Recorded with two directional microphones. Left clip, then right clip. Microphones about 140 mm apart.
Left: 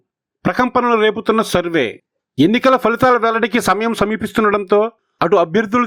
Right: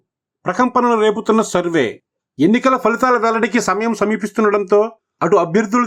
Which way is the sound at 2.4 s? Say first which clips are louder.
Left 1 dB; 25° left (ahead or behind).